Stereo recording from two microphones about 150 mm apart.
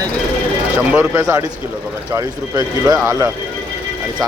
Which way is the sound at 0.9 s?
20° right (ahead or behind).